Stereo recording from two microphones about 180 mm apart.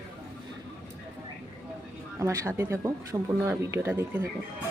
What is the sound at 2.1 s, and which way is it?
Speech, 15° right (ahead or behind).